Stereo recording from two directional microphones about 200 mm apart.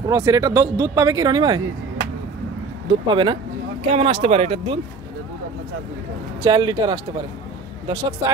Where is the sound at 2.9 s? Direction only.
25° right (ahead or behind).